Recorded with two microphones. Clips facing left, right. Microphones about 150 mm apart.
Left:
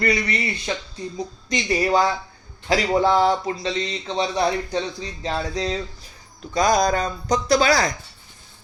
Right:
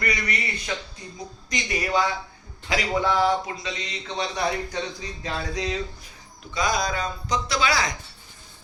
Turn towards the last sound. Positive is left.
turn(degrees=40)  # may be behind; listen again after turning